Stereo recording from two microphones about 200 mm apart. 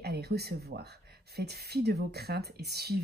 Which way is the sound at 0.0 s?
55° right (ahead or behind).